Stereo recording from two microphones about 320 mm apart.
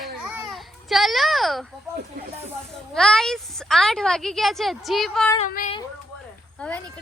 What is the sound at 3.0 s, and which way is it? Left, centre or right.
A woman's voice, centre.